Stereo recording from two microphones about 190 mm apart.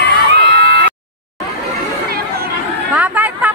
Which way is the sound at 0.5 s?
50° right (ahead or behind).